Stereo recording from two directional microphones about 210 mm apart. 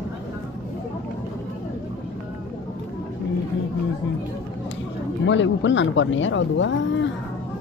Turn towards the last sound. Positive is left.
turn(degrees=60)  # may be behind; listen again after turning